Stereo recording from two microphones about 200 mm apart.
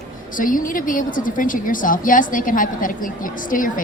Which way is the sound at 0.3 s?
40° left (ahead or behind).